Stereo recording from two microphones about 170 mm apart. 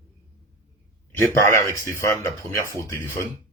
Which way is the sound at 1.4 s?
15° left (ahead or behind).